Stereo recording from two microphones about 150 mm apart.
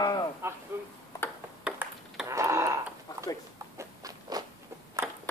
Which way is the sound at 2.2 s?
20° right (ahead or behind).